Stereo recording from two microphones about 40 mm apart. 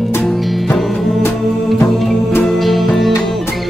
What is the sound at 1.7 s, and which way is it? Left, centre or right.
Music, centre.